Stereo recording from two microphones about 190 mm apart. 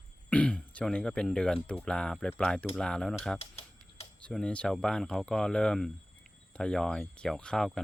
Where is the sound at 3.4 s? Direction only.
30° left (ahead or behind).